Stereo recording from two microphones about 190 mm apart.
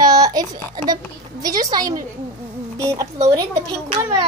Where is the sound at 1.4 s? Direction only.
20° right (ahead or behind).